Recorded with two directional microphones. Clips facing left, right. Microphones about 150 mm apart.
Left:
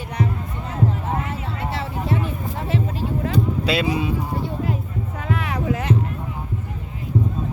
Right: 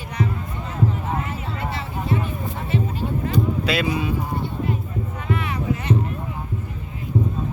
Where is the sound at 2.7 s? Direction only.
90° left.